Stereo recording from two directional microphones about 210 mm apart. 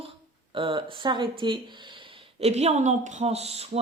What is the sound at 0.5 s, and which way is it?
A woman's voice, 25° right (ahead or behind).